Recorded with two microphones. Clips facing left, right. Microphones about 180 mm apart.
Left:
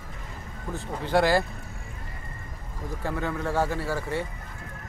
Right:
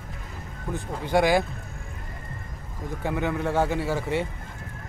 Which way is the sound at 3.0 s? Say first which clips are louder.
Right 3 dB; 15° right (ahead or behind).